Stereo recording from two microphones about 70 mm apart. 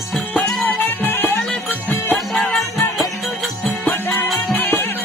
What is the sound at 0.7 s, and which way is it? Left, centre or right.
Music, left.